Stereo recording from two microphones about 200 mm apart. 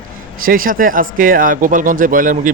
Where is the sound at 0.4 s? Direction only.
45° right (ahead or behind).